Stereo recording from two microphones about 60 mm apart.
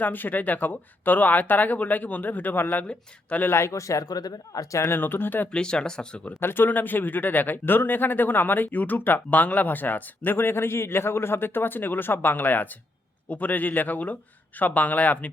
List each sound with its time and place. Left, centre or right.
0.0 s speech: left
3.4 s speech: left
4.9 s speech: left
5.5 s speech: centre
6.2 s speech: left